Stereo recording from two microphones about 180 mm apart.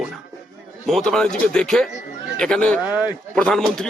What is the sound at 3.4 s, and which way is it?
Speech, 5° left (ahead or behind).